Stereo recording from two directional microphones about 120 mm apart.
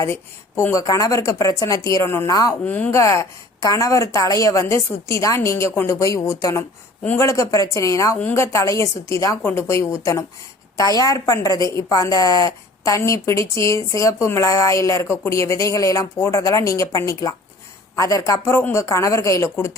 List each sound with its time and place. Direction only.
0.0 s a woman's voice: 25° left (ahead or behind)
2.6 s speech: 15° left (ahead or behind)
3.0 s a woman's voice: 25° left (ahead or behind)
7.0 s speech: 15° left (ahead or behind)
7.3 s a woman's voice: 25° left (ahead or behind)